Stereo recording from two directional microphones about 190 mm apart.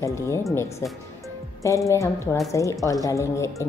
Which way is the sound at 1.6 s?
15° left (ahead or behind).